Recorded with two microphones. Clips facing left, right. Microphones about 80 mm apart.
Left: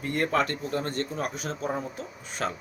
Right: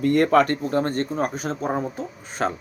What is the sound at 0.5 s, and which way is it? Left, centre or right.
Speech, right.